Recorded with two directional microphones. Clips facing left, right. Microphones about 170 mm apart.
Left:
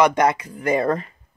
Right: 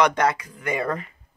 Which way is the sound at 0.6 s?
35° left (ahead or behind).